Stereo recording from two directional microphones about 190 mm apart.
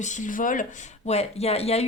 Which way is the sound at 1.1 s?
35° left (ahead or behind).